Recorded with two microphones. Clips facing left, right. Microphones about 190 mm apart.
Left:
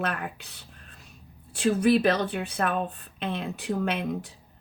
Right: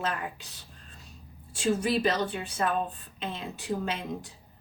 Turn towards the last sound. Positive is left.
turn(degrees=60)  # may be behind; listen again after turning